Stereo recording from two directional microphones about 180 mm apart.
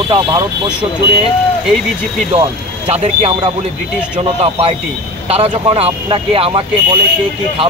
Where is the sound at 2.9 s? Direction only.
35° right (ahead or behind).